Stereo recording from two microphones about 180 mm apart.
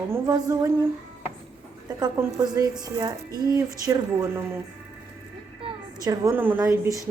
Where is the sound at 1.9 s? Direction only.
20° right (ahead or behind).